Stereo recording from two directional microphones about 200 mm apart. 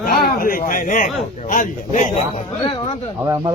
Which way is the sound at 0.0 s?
50° left (ahead or behind).